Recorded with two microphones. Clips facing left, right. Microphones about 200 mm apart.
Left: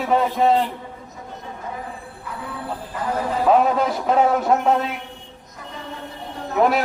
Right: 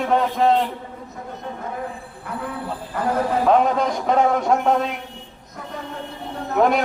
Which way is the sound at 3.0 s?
60° right (ahead or behind).